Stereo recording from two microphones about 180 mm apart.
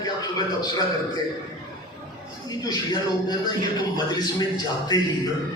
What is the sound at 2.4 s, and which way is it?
Speech, 20° left (ahead or behind).